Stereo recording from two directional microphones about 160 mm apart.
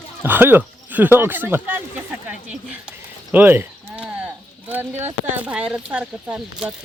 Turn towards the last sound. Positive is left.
turn(degrees=-5)  # may be behind; listen again after turning